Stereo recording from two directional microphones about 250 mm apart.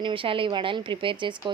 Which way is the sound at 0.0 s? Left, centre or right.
Right.